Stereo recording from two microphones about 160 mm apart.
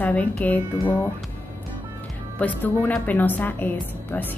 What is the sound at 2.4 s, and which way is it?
A woman's voice, 10° left (ahead or behind).